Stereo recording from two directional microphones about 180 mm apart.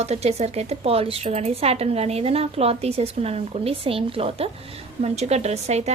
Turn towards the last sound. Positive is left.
turn(degrees=-40)  # may be behind; listen again after turning